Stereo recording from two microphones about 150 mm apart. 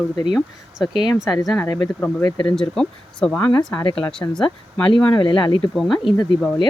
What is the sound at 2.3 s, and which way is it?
Speech, 30° left (ahead or behind).